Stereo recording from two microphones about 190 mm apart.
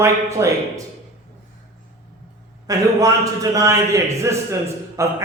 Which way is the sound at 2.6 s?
20° right (ahead or behind).